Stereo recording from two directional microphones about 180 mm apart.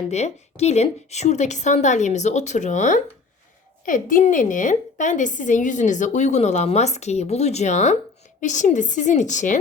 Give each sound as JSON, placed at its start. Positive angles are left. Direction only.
{"t": 0.1, "sound": "a woman's voice", "side_deg": 40}